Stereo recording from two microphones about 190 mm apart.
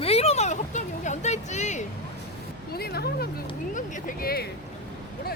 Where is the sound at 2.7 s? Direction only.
55° left (ahead or behind).